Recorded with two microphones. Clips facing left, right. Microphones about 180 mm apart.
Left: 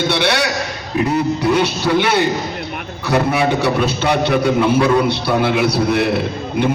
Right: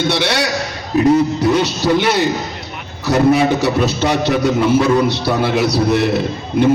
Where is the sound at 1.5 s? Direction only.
60° left (ahead or behind).